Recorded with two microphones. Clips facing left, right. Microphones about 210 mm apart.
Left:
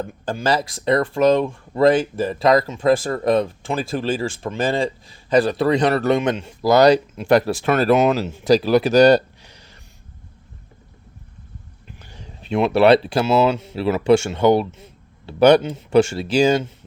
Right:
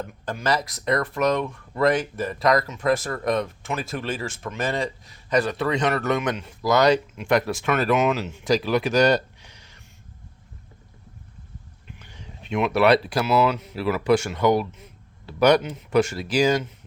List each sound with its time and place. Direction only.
0.0 s speech: 30° left (ahead or behind)
11.9 s speech: 35° left (ahead or behind)